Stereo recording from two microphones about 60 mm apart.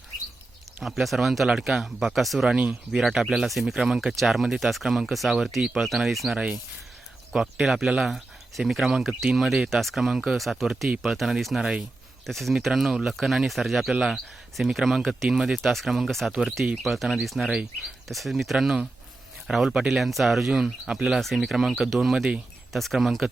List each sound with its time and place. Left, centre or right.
0.8 s speech: centre
2.5 s speech: right
2.9 s speech: centre
7.3 s speech: centre
8.0 s speech: centre
12.2 s speech: centre
21.2 s speech: centre
22.1 s speech: centre
22.7 s speech: centre